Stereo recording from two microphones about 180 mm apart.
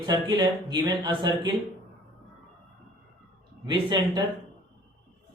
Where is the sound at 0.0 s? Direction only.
25° right (ahead or behind).